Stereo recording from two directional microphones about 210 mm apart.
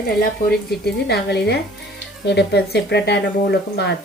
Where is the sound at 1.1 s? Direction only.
50° left (ahead or behind).